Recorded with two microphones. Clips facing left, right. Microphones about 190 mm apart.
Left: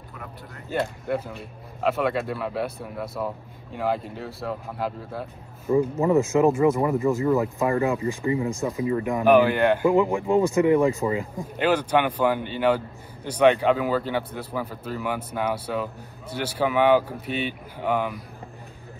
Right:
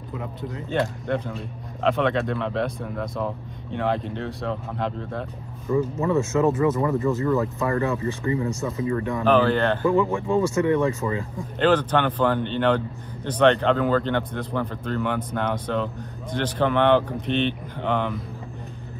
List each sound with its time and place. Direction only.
0.5 s speech: 5° left (ahead or behind)
5.7 s speech: 30° left (ahead or behind)
6.0 s speech: 15° left (ahead or behind)